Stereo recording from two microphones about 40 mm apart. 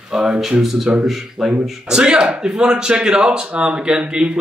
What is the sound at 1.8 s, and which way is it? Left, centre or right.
A man's voice, right.